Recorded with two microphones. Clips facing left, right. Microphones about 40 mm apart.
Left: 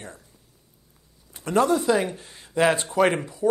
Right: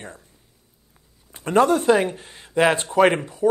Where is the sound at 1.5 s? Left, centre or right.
Right; by 2.8 s centre.